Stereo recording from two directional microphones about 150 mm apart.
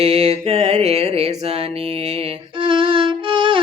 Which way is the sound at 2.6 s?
35° right (ahead or behind).